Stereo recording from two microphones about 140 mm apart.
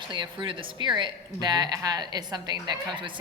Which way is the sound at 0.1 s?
35° right (ahead or behind).